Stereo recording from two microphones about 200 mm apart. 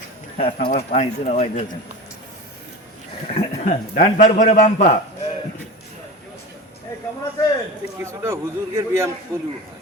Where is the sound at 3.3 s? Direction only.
35° left (ahead or behind).